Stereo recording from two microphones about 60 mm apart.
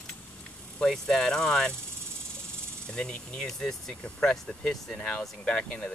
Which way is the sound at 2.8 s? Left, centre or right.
Centre.